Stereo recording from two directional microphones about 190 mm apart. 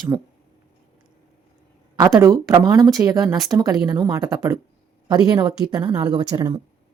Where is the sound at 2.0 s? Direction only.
20° right (ahead or behind).